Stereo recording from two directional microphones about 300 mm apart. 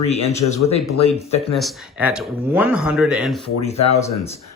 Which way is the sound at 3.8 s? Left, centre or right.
Left.